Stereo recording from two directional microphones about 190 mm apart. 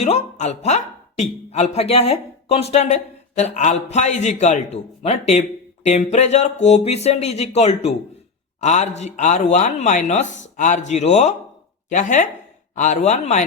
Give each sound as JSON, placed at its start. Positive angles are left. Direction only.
{"t": 0.0, "sound": "speech", "side_deg": 35}